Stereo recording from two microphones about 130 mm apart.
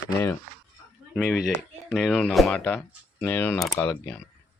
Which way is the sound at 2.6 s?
15° left (ahead or behind).